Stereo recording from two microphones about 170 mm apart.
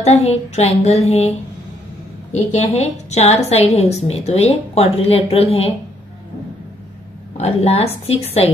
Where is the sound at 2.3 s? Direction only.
40° left (ahead or behind).